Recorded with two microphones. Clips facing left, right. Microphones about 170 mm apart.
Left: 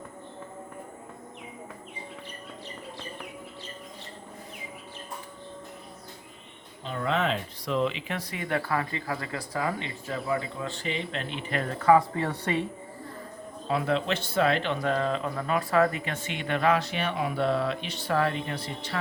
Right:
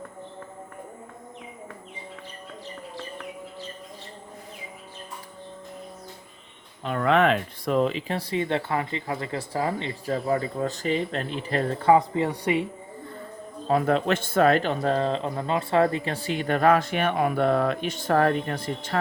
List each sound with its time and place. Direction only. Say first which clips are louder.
6.8 s speech: right 7 dB; 65° right (ahead or behind); by 12.6 s 15° right (ahead or behind)
13.7 s speech: right 5 dB; 45° right (ahead or behind)
14.8 s speech: right 3 dB; 35° right (ahead or behind); by 18.9 s 50° right (ahead or behind)